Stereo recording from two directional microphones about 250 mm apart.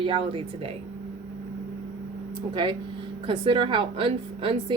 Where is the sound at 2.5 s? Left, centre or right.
Centre.